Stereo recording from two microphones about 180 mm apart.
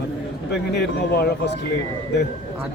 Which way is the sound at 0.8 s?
60° left (ahead or behind).